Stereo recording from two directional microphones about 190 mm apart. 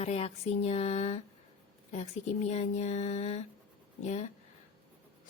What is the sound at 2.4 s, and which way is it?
A woman's voice, 35° left (ahead or behind).